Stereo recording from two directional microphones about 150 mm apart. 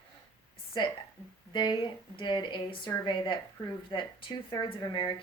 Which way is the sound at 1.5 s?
30° left (ahead or behind).